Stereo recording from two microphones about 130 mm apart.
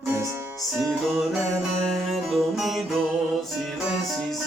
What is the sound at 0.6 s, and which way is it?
Music, centre (ahead or behind).